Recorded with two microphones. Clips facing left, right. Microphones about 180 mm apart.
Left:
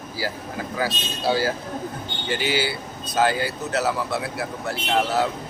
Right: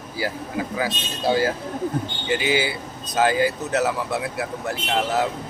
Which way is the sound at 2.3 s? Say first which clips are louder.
Right 2 dB; 20° right (ahead or behind).